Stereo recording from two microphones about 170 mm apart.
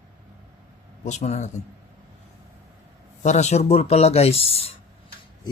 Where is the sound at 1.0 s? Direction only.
45° left (ahead or behind).